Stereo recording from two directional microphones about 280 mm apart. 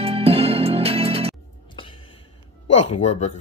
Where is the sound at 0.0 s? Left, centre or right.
Right.